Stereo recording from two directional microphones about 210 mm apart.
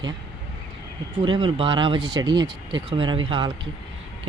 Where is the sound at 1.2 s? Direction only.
25° right (ahead or behind).